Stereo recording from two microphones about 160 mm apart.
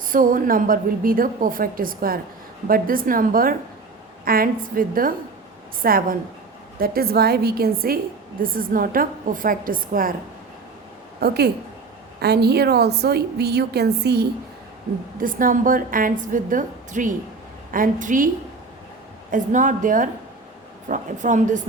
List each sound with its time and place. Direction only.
0.1 s a woman's voice: 60° right (ahead or behind)
11.2 s a woman's voice: 90° right
15.2 s a woman's voice: 60° right (ahead or behind)
19.3 s a woman's voice: 50° right (ahead or behind)